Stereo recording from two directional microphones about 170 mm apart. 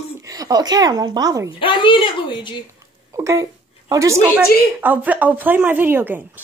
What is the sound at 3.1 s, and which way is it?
A woman's voice, 15° right (ahead or behind).